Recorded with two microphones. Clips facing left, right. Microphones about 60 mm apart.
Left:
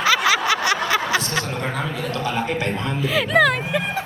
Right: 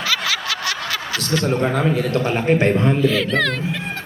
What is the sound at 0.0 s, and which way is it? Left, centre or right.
Snicker, left.